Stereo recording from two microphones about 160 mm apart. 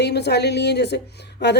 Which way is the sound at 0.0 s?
90° left.